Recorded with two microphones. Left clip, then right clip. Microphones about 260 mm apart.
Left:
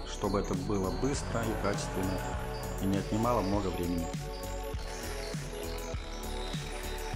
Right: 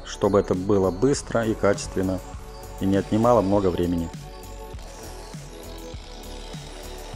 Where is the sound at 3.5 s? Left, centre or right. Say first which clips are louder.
Right 11 dB; centre.